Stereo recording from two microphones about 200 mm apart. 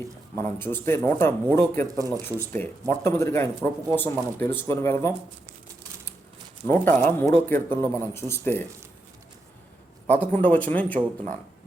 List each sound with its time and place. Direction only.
0.3 s speech: 10° left (ahead or behind)
2.0 s speech: 15° right (ahead or behind)
2.6 s speech: 10° left (ahead or behind)
6.7 s speech: 10° left (ahead or behind)
10.1 s speech: 10° left (ahead or behind)